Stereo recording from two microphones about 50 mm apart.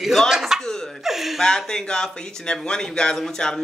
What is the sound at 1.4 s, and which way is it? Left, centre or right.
Speech, centre.